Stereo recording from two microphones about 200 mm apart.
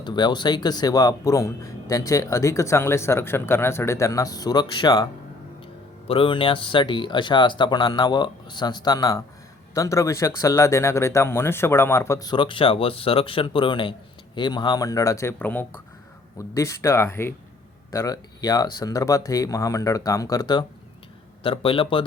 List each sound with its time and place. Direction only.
0.0 s speech: 20° left (ahead or behind)
6.1 s speech: 25° left (ahead or behind)